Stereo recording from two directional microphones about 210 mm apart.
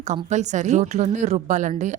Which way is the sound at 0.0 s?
35° right (ahead or behind).